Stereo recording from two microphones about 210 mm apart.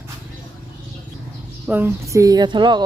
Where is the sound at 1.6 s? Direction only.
10° right (ahead or behind).